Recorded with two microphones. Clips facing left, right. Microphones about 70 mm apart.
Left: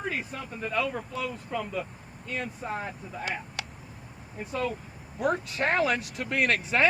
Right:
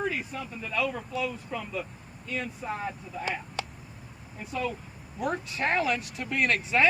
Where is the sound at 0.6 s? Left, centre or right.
Left.